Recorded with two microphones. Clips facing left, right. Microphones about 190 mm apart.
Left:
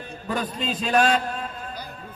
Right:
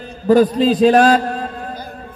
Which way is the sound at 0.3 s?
35° right (ahead or behind).